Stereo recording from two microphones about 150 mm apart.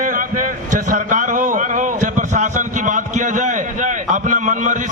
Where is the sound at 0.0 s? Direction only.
60° right (ahead or behind).